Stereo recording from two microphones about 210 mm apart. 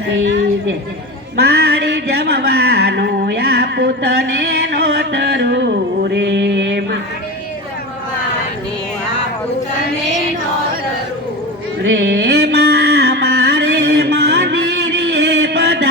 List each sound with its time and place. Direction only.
1.4 s music: 50° right (ahead or behind)
11.8 s music: 60° right (ahead or behind)